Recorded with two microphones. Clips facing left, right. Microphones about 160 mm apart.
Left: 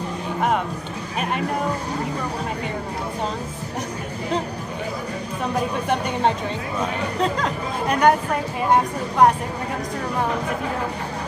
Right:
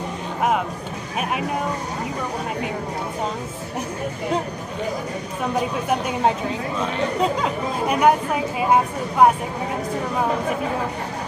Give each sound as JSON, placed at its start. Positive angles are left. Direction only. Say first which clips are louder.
{"t": 5.6, "sound": "speech", "louder": "even", "side_deg": -5}